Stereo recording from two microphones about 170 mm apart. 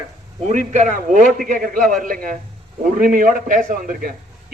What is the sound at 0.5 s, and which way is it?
A man's voice, 45° right (ahead or behind).